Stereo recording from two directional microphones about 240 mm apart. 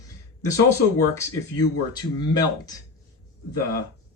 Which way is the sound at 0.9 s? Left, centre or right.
Centre.